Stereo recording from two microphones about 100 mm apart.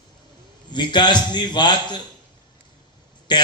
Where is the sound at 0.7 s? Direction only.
50° left (ahead or behind).